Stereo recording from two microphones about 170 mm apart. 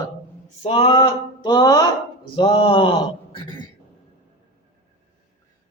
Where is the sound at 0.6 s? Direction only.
30° left (ahead or behind).